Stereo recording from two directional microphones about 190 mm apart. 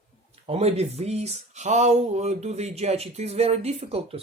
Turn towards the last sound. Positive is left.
turn(degrees=-30)  # may be behind; listen again after turning